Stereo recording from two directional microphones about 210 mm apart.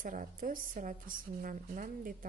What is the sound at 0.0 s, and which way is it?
A woman's voice, 40° right (ahead or behind).